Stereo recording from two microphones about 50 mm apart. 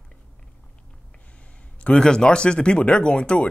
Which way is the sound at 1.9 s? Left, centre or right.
Centre.